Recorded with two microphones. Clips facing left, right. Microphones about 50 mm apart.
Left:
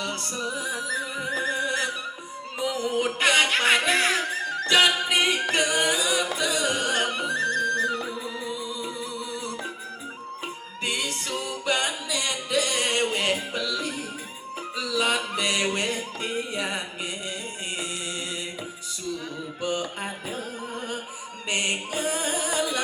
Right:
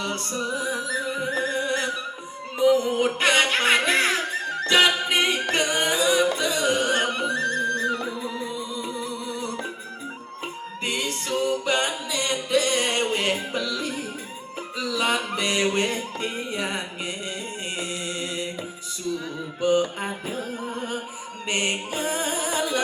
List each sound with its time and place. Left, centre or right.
0.0 s music: right
5.5 s singing: right
6.3 s music: right
21.4 s mantra: right
21.9 s music: right